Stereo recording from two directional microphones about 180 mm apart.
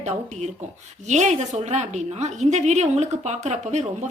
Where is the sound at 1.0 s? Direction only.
40° right (ahead or behind).